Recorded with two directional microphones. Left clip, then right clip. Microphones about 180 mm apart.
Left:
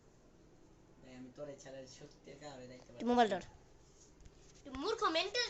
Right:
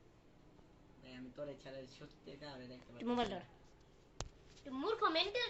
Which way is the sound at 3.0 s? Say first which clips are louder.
Left 5 dB; 25° left (ahead or behind).